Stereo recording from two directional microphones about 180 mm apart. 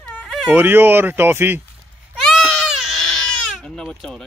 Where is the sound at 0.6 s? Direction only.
10° right (ahead or behind).